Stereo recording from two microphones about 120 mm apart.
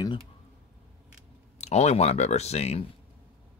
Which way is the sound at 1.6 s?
65° left (ahead or behind).